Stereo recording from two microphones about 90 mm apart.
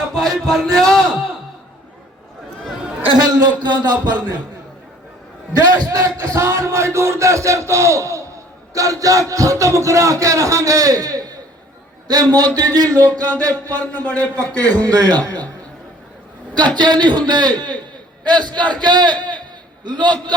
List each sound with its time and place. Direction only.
0.1 s speech: centre (ahead or behind)
3.2 s a man's voice: 50° right (ahead or behind)
5.5 s a man's voice: 45° right (ahead or behind)
13.9 s a man's voice: 20° left (ahead or behind)
14.8 s a man's voice: 50° right (ahead or behind)
16.7 s a man's voice: 55° right (ahead or behind)